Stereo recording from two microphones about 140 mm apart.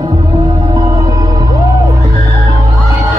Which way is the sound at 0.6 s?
25° right (ahead or behind).